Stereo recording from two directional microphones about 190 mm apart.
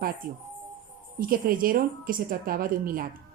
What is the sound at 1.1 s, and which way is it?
Speech, 50° right (ahead or behind).